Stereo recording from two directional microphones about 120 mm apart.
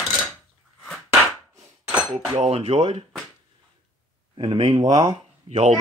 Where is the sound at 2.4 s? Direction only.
55° right (ahead or behind).